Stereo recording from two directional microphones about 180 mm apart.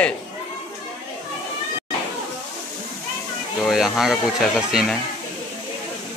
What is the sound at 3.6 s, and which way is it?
Speech, centre (ahead or behind).